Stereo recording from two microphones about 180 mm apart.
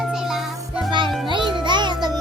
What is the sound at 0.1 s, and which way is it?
Music, centre (ahead or behind).